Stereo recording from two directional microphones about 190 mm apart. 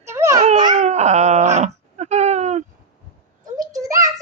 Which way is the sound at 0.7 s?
35° right (ahead or behind).